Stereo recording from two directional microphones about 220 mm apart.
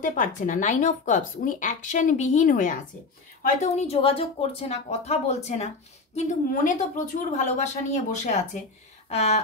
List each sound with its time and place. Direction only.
0.0 s speech: 35° left (ahead or behind)